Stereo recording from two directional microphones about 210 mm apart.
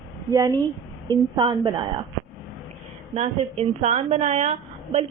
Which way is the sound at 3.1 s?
30° right (ahead or behind).